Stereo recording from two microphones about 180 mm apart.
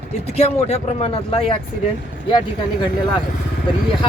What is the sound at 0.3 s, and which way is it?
Speech, 35° left (ahead or behind).